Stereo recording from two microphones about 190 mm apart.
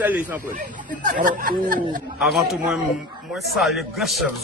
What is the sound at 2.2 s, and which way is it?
A man's voice, centre (ahead or behind).